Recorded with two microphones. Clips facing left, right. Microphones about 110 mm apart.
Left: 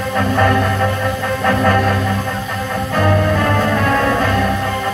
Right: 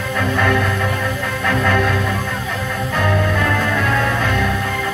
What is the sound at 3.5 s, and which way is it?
Music, 35° left (ahead or behind).